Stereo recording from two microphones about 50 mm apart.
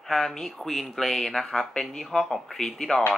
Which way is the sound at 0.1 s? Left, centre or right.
Centre.